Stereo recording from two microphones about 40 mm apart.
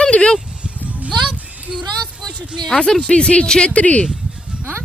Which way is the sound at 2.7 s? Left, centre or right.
Centre.